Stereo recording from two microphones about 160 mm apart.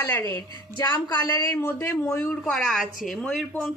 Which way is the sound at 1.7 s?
10° left (ahead or behind).